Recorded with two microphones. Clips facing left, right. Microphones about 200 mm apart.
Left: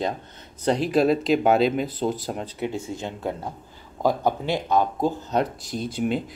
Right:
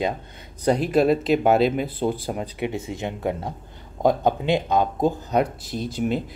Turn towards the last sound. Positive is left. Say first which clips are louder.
# right 1 dB
turn(degrees=-5)  # may be behind; listen again after turning